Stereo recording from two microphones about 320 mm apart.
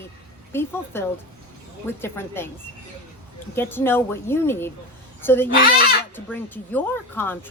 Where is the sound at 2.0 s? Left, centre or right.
Centre.